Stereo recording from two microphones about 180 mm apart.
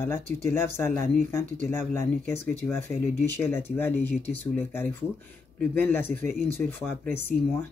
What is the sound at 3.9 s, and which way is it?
Speech, 35° left (ahead or behind).